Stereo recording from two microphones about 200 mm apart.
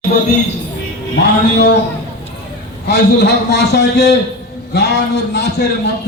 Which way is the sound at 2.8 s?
55° left (ahead or behind).